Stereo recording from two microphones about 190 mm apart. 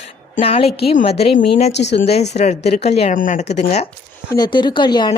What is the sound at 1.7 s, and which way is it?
Speech, 65° left (ahead or behind).